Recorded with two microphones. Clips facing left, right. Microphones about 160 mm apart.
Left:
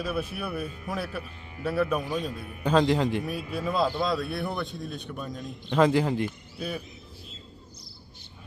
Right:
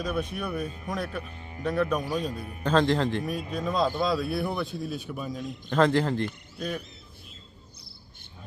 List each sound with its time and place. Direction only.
0.0 s a man's voice: 5° left (ahead or behind)
5.8 s a man's voice: 10° left (ahead or behind)